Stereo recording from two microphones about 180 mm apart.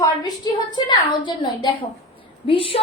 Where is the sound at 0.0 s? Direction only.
20° left (ahead or behind).